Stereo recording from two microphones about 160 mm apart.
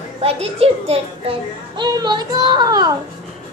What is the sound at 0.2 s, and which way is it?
A child's voice, 40° right (ahead or behind).